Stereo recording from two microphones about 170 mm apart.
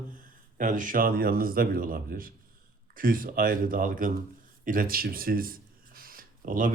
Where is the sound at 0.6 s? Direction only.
50° right (ahead or behind).